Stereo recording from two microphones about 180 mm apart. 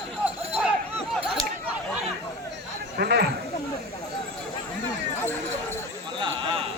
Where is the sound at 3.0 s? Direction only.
65° right (ahead or behind).